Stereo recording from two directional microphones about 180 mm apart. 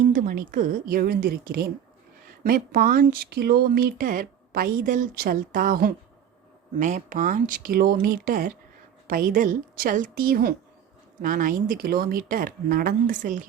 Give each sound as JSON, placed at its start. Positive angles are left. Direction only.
{"t": 0.1, "sound": "speech", "side_deg": -50}